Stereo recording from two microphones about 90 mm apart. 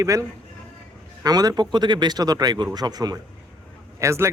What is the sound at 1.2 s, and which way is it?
Speech, 45° right (ahead or behind).